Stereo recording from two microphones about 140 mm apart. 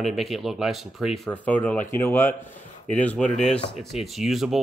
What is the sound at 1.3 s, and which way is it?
Speech, 10° left (ahead or behind).